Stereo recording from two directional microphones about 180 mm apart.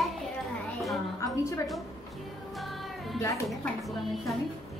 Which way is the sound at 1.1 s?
15° left (ahead or behind).